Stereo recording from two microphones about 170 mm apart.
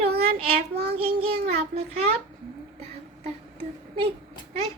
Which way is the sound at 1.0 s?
40° right (ahead or behind).